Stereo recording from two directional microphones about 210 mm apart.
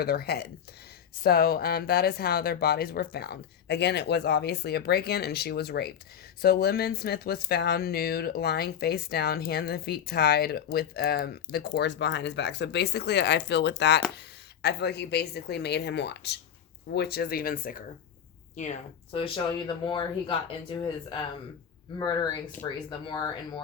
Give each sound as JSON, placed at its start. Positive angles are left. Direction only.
{"t": 0.0, "sound": "speech", "side_deg": 50}
{"t": 21.9, "sound": "speech", "side_deg": 20}